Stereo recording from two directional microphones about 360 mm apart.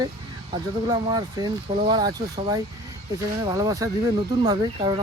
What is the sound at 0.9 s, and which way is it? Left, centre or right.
Speech, centre.